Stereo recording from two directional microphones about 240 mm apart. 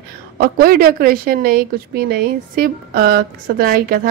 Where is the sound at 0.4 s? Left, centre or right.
Right.